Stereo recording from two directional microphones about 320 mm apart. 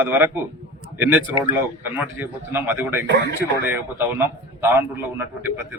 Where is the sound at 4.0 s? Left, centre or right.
Centre.